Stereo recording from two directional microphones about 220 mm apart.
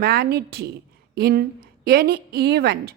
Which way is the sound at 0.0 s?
45° right (ahead or behind).